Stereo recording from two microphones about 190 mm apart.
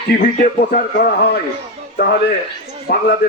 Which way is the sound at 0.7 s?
55° left (ahead or behind).